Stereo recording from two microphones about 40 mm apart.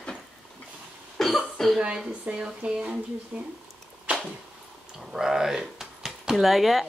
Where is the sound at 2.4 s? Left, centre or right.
Right.